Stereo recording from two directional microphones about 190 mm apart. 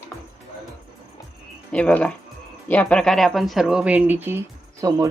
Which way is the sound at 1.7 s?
5° left (ahead or behind).